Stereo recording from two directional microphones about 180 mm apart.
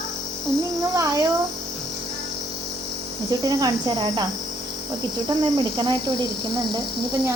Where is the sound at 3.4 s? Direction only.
20° right (ahead or behind).